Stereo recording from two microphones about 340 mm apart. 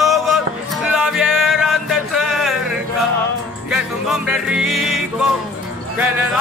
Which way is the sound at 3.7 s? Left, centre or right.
Centre.